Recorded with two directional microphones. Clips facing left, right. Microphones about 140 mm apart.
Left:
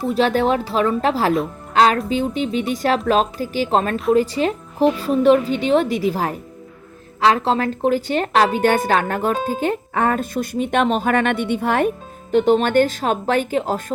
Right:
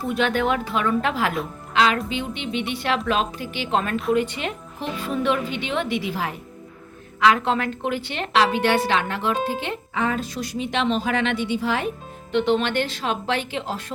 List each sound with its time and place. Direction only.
0.1 s a woman's voice: 35° left (ahead or behind)
1.7 s music: 40° left (ahead or behind)
2.0 s a woman's voice: 40° left (ahead or behind); by 11.9 s 55° left (ahead or behind)
12.3 s a woman's voice: 45° left (ahead or behind)